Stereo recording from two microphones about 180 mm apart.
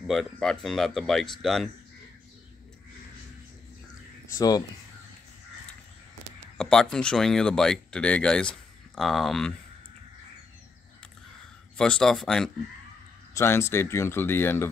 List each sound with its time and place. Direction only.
0.0 s speech: centre (ahead or behind)
4.3 s speech: 20° left (ahead or behind)
6.6 s speech: 5° left (ahead or behind)
11.7 s speech: 5° left (ahead or behind)
13.3 s speech: 15° left (ahead or behind)